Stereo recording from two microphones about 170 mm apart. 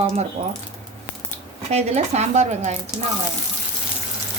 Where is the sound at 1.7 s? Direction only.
40° right (ahead or behind).